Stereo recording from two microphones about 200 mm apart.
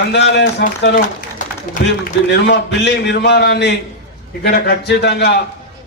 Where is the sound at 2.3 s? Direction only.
60° left (ahead or behind).